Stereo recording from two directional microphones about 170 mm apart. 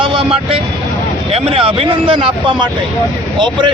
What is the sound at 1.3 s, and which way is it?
Speech, 35° right (ahead or behind).